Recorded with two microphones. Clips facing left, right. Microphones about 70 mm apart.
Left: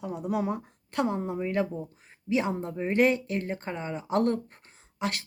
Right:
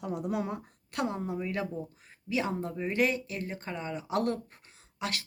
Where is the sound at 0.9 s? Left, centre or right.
Left.